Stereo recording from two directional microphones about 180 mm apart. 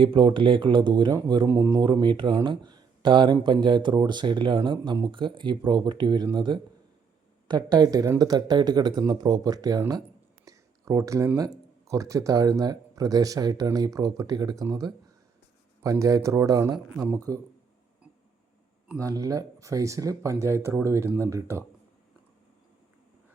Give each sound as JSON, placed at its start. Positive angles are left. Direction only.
{"t": 0.0, "sound": "speech", "side_deg": -25}
{"t": 18.9, "sound": "speech", "side_deg": -20}